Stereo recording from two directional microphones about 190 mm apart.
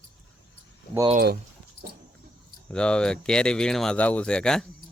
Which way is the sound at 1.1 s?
55° right (ahead or behind).